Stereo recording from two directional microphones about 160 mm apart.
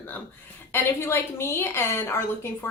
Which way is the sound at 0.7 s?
15° left (ahead or behind).